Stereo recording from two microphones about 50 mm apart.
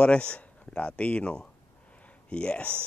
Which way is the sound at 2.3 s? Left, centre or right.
Left.